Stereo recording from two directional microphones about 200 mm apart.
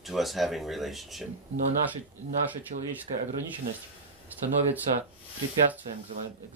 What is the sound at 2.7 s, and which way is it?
Speech, 40° right (ahead or behind).